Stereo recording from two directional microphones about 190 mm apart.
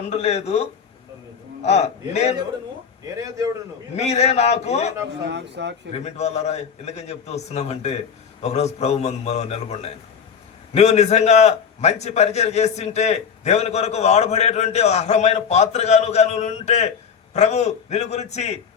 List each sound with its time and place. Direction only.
0.1 s a man's voice: 35° left (ahead or behind)
3.9 s a man's voice: 35° left (ahead or behind)
5.3 s speech: 70° right (ahead or behind)
6.1 s a man's voice: 35° left (ahead or behind)